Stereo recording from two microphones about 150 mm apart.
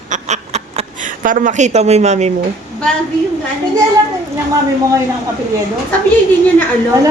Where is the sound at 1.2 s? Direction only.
60° right (ahead or behind).